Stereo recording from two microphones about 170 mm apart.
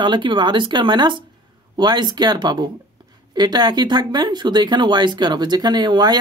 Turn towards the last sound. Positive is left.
turn(degrees=-25)  # may be behind; listen again after turning